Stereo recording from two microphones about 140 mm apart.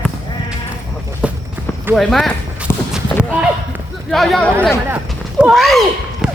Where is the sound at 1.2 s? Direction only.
10° right (ahead or behind).